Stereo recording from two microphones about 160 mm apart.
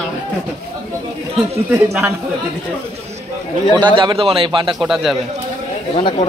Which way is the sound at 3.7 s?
30° right (ahead or behind).